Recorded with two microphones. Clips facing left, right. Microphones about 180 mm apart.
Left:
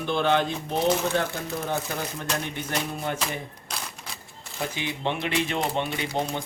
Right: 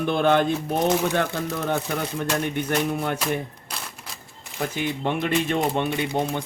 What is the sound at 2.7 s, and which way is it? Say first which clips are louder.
Music: right 4 dB; 60° right (ahead or behind).